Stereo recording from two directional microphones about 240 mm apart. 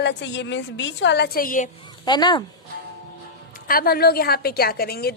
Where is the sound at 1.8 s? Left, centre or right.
Centre.